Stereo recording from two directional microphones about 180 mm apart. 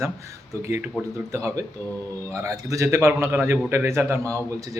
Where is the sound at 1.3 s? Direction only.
15° right (ahead or behind).